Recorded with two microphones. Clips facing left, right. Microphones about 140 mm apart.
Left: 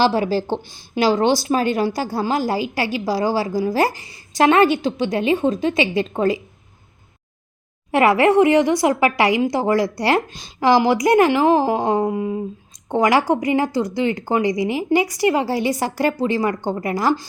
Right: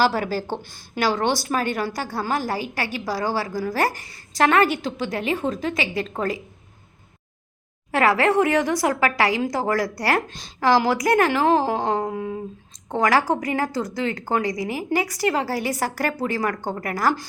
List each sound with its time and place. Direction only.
0.0 s a woman's voice: 25° left (ahead or behind)
7.9 s a woman's voice: 20° left (ahead or behind)